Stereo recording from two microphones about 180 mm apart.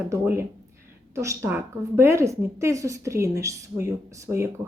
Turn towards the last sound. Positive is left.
turn(degrees=-15)  # may be behind; listen again after turning